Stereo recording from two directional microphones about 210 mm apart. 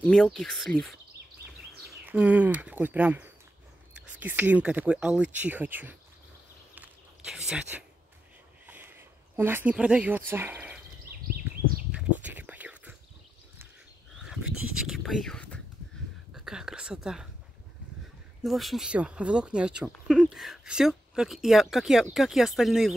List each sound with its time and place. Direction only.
0.0 s speech: 5° left (ahead or behind)
6.7 s a sound: 5° right (ahead or behind)
11.1 s a sound: 45° right (ahead or behind)
11.9 s whispering: 5° right (ahead or behind)
14.1 s speech: centre (ahead or behind)
18.4 s speech: centre (ahead or behind)